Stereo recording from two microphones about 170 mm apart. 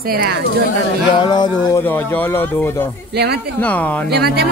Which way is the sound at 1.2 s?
25° left (ahead or behind).